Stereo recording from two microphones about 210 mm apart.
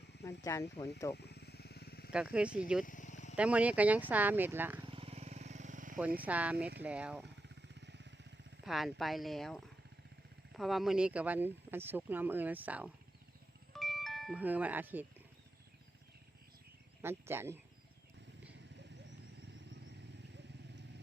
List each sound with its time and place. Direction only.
0.2 s speech: 15° left (ahead or behind)
1.1 s vehicle: 50° left (ahead or behind)
2.1 s speech: 5° right (ahead or behind)
2.8 s vehicle: 40° left (ahead or behind)
3.3 s speech: 5° right (ahead or behind)
4.9 s vehicle: 25° right (ahead or behind)
6.1 s speech: 5° right (ahead or behind)
7.4 s vehicle: 55° right (ahead or behind)
8.6 s speech: centre (ahead or behind)
13.7 s music: centre (ahead or behind)
17.0 s speech: 10° right (ahead or behind)